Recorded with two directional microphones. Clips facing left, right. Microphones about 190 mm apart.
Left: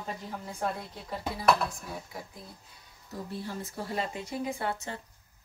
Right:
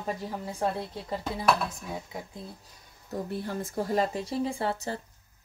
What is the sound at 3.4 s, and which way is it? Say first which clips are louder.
Speech: right 6 dB; 45° right (ahead or behind).